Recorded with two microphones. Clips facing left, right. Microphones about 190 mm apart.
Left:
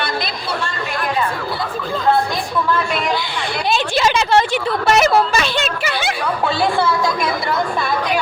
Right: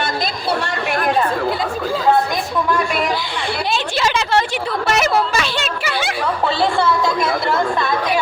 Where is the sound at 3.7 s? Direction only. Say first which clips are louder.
Left 4 dB; 15° left (ahead or behind).